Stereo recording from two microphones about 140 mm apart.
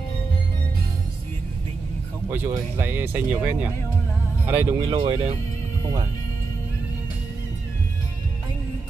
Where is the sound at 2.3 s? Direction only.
15° right (ahead or behind).